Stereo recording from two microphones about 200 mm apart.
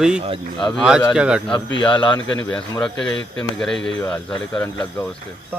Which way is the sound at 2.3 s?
5° left (ahead or behind).